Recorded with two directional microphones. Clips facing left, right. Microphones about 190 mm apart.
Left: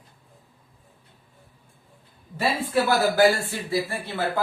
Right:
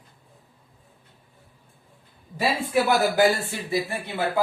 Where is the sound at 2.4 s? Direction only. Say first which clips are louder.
Even; 15° right (ahead or behind).